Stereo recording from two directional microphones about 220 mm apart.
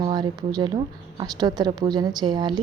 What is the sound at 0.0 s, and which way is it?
Speech, 20° right (ahead or behind).